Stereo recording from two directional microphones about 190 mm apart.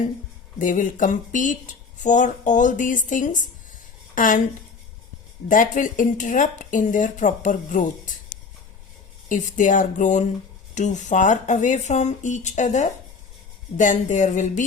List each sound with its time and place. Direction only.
0.6 s a woman's voice: 45° left (ahead or behind)
5.5 s speech: 45° left (ahead or behind)
9.3 s speech: 40° left (ahead or behind)